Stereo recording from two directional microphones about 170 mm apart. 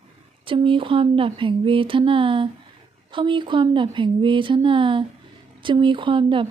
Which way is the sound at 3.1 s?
30° right (ahead or behind).